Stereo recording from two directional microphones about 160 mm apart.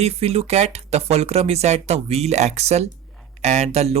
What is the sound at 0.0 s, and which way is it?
Speech, 40° right (ahead or behind).